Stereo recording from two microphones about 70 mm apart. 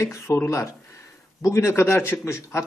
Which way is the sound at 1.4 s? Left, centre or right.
Left.